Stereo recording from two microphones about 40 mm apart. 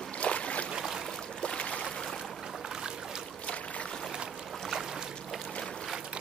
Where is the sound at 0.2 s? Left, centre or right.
Left.